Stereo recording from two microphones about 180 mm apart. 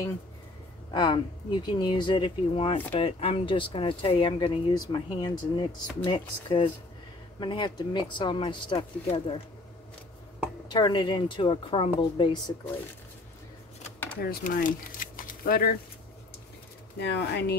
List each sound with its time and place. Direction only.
0.9 s a woman's voice: 25° left (ahead or behind)
10.7 s a woman's voice: 25° left (ahead or behind)
14.2 s speech: 55° left (ahead or behind)
17.0 s speech: 70° left (ahead or behind)